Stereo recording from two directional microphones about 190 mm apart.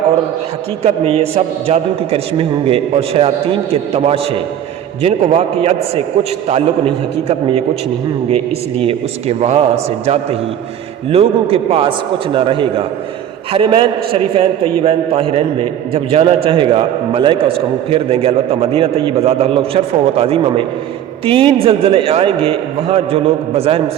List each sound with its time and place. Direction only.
0.8 s a man's voice: 30° right (ahead or behind)
8.8 s a man's voice: 30° right (ahead or behind)
11.1 s a man's voice: 30° right (ahead or behind)